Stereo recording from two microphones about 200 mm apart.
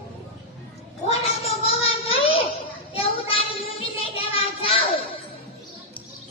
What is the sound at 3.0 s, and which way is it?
Child singing, 30° left (ahead or behind).